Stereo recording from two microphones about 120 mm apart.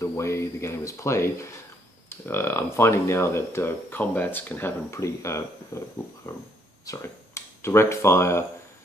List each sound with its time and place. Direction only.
0.0 s speech: 25° left (ahead or behind)